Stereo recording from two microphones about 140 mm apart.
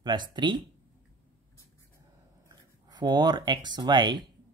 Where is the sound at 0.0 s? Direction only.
30° right (ahead or behind).